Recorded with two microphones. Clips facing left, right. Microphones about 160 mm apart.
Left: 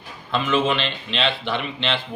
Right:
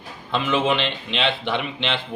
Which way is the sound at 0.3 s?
15° right (ahead or behind).